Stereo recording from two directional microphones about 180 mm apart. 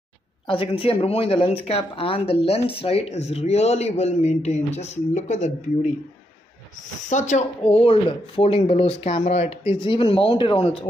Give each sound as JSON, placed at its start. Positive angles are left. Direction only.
{"t": 0.5, "sound": "speech", "side_deg": 30}
{"t": 7.1, "sound": "speech", "side_deg": 40}